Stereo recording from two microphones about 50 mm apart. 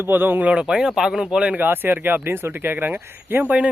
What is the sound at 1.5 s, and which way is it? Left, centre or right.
Speech, right.